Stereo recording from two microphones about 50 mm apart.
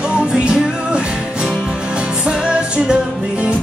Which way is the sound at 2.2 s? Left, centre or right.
Centre.